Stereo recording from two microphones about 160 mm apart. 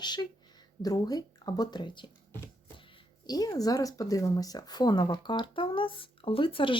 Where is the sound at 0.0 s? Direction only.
25° left (ahead or behind).